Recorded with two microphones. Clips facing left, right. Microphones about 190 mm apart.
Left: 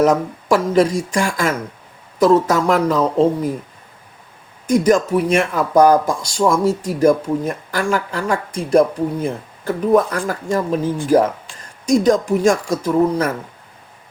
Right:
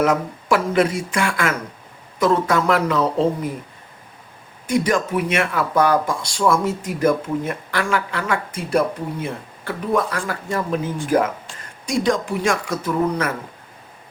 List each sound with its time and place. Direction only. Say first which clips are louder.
0.0 s speech: left 4 dB; 40° left (ahead or behind)
4.7 s speech: left 5 dB; 40° left (ahead or behind)